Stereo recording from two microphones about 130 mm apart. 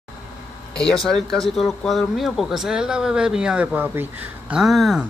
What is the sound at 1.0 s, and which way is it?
Speech, 5° left (ahead or behind).